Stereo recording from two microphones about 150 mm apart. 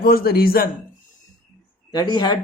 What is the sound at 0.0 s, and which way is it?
Speech, 85° left.